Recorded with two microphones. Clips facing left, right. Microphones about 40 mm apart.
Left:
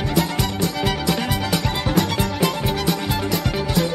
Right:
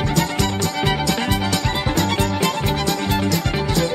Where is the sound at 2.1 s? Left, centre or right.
Centre.